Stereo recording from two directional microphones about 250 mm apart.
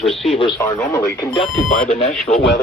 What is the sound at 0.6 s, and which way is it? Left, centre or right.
Speech, centre.